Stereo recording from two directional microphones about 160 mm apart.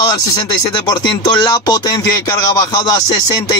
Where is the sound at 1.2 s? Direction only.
25° left (ahead or behind).